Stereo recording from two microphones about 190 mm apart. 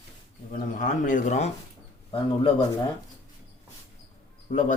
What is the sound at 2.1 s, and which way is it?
Speech, 25° left (ahead or behind).